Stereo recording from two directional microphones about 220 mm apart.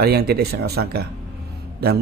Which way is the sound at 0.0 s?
45° right (ahead or behind).